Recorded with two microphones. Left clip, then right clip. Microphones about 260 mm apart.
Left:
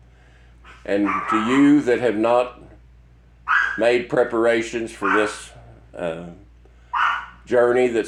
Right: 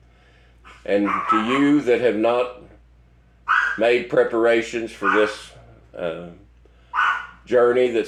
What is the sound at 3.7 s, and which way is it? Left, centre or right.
Speech, left.